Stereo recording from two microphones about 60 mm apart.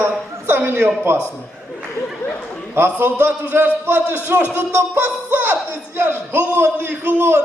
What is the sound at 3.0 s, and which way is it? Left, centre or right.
A man's voice, right.